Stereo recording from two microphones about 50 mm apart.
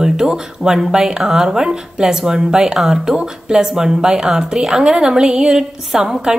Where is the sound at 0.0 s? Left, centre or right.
Centre.